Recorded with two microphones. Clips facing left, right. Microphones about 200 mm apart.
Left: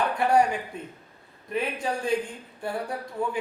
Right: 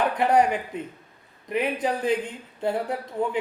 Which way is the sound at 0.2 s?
20° right (ahead or behind).